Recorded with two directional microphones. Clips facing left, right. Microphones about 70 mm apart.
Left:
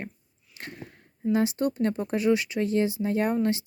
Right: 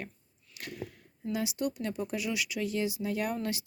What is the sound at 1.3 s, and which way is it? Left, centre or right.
Speech, left.